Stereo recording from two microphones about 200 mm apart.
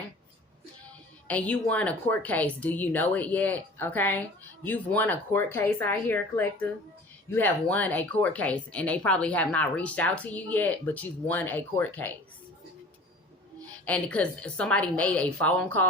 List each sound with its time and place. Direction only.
1.3 s speech: 5° left (ahead or behind)
13.8 s speech: 5° left (ahead or behind)